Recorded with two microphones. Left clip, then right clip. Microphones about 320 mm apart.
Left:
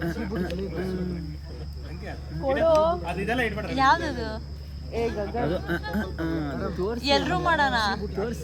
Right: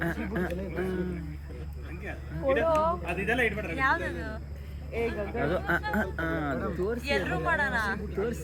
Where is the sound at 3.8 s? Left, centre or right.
Centre.